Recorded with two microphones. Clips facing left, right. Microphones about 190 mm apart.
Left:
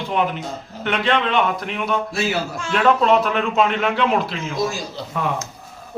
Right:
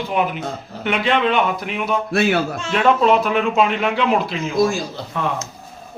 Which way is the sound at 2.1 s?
60° right (ahead or behind).